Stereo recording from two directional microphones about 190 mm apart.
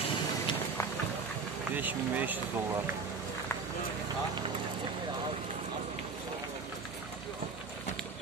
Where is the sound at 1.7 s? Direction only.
10° right (ahead or behind).